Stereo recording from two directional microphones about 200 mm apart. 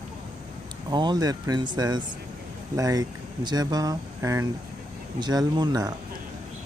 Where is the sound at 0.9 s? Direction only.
20° right (ahead or behind).